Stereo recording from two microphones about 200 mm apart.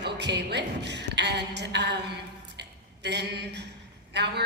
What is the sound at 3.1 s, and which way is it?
A woman's voice, 60° right (ahead or behind).